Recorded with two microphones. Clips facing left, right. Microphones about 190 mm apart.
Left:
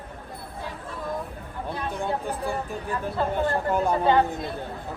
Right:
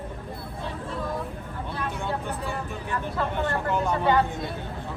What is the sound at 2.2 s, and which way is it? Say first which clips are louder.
Speech: left 2 dB; 35° left (ahead or behind).